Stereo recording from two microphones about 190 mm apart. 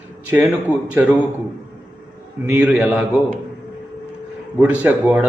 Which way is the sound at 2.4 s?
5° right (ahead or behind).